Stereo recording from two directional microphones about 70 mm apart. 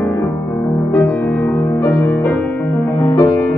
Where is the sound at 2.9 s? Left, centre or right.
Left.